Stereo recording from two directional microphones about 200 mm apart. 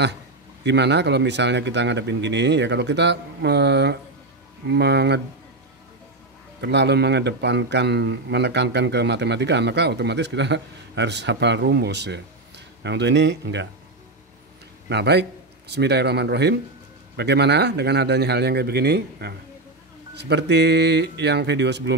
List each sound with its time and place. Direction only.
0.7 s a man's voice: 60° right (ahead or behind)
6.6 s a man's voice: 55° right (ahead or behind)
14.9 s a man's voice: 55° right (ahead or behind)